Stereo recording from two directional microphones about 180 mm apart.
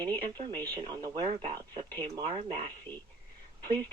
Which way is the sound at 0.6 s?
25° right (ahead or behind).